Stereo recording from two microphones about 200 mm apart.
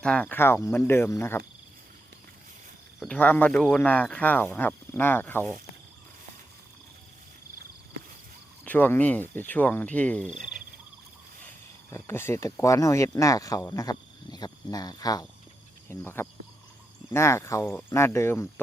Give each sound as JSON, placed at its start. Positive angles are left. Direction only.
{"t": 0.0, "sound": "speech", "side_deg": 5}
{"t": 3.0, "sound": "speech", "side_deg": 5}
{"t": 8.6, "sound": "speech", "side_deg": 10}
{"t": 11.9, "sound": "speech", "side_deg": 15}